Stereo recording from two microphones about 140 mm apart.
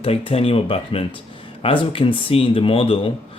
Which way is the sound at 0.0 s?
40° left (ahead or behind).